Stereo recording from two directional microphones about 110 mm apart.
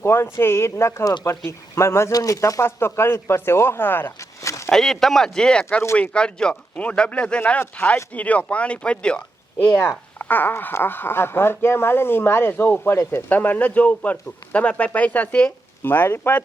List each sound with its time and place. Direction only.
0.0 s speech: 25° left (ahead or behind)
4.7 s speech: 5° left (ahead or behind); by 16.4 s 20° left (ahead or behind)